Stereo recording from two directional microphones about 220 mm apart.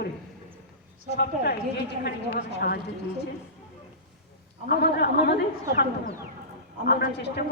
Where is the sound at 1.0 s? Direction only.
50° left (ahead or behind).